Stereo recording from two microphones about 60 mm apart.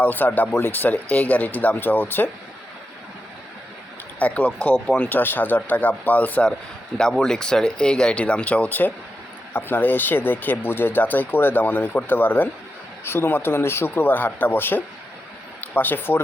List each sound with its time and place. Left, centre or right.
0.0 s speech: left
4.2 s speech: left
6.9 s speech: centre; by 16.2 s left